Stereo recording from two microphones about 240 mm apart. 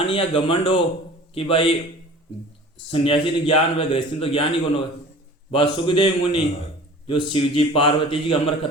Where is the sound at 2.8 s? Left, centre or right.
Left.